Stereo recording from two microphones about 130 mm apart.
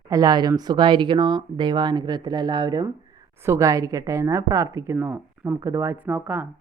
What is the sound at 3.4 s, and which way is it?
Speech, 25° right (ahead or behind).